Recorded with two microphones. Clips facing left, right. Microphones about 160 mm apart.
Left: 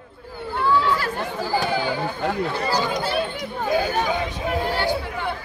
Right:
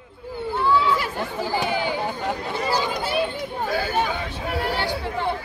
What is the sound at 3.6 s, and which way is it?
Chatter, 15° left (ahead or behind).